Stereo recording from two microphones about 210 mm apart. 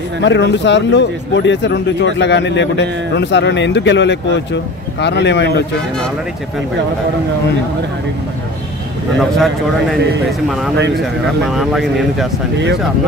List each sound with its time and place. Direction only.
0.2 s speech: 55° left (ahead or behind)
11.4 s speech: centre (ahead or behind)